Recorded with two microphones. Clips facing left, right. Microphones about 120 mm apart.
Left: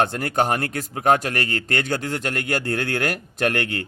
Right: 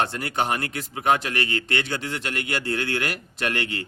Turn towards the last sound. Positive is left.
turn(degrees=50)  # may be behind; listen again after turning